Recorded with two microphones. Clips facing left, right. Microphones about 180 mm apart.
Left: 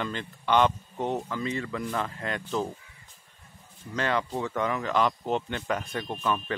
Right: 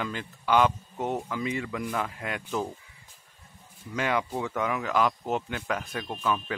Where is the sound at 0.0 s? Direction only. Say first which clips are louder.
Left 1 dB; 5° right (ahead or behind).